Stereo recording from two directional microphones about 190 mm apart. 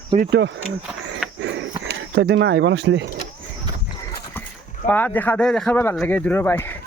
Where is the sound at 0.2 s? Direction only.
65° right (ahead or behind).